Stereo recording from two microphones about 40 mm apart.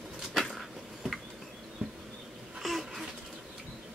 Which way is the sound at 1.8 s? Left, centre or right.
Centre.